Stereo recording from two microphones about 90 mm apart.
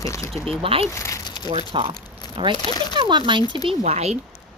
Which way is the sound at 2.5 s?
60° left (ahead or behind).